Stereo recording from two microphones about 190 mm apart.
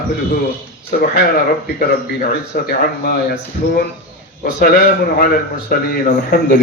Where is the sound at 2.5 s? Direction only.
50° left (ahead or behind).